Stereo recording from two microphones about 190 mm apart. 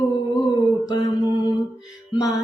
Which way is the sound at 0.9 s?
20° left (ahead or behind).